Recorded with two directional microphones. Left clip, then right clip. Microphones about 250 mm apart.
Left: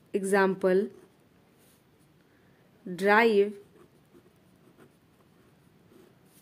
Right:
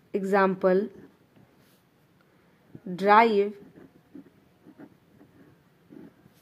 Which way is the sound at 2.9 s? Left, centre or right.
Centre.